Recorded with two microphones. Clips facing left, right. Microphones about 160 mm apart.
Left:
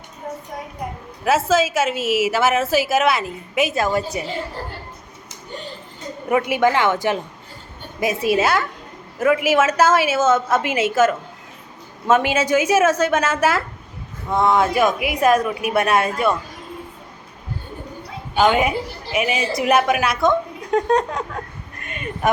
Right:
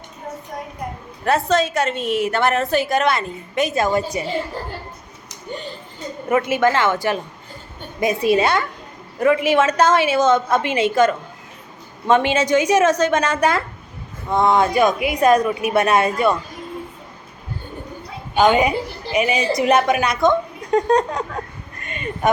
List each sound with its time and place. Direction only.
1.2 s a woman's voice: 5° left (ahead or behind)
6.4 s a woman's voice: 15° left (ahead or behind)
8.0 s a woman's voice: 5° left (ahead or behind)
18.3 s a woman's voice: centre (ahead or behind)